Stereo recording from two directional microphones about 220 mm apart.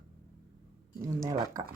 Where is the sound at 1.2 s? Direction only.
15° right (ahead or behind).